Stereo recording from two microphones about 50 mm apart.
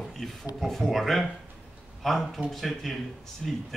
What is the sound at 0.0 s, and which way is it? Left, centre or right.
Speech, centre.